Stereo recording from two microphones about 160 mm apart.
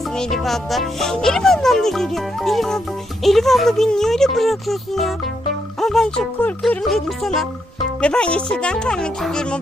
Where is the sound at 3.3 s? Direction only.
Centre (ahead or behind).